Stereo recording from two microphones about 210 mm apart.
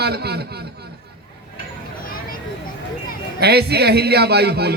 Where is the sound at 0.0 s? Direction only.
50° right (ahead or behind).